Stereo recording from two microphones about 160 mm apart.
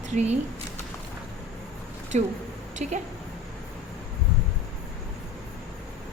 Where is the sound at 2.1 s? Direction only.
45° right (ahead or behind).